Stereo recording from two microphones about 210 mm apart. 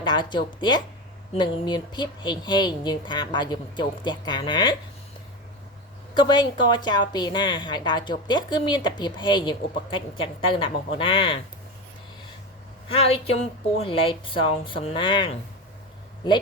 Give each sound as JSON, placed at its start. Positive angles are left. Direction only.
{"t": 0.0, "sound": "a woman's voice", "side_deg": 20}
{"t": 6.1, "sound": "a woman's voice", "side_deg": 20}
{"t": 12.9, "sound": "a woman's voice", "side_deg": 25}